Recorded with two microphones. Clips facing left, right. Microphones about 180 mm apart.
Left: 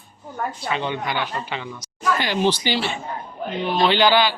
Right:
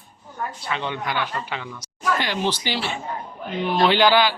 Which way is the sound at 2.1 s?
5° left (ahead or behind).